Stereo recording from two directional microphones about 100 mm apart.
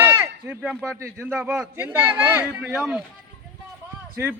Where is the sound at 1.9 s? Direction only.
20° right (ahead or behind).